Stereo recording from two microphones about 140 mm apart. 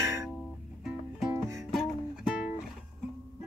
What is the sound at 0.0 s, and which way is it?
Music, 20° right (ahead or behind).